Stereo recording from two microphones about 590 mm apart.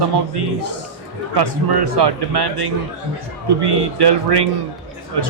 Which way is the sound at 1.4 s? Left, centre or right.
Right.